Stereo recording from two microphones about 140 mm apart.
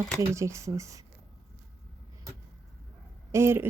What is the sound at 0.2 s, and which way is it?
Speech, 20° right (ahead or behind).